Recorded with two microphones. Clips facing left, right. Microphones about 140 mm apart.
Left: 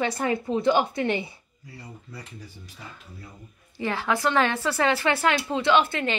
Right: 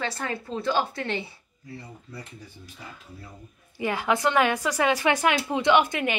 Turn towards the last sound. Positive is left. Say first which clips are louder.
# right 1 dB
turn(degrees=-15)  # may be behind; listen again after turning